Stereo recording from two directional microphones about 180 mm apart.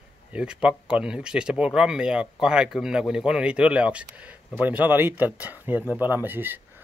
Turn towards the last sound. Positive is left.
turn(degrees=-10)  # may be behind; listen again after turning